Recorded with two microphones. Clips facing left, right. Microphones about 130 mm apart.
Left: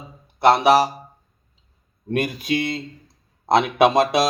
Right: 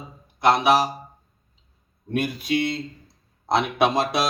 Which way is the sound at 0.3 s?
35° left (ahead or behind).